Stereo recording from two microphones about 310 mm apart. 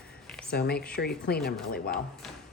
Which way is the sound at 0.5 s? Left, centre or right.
Left.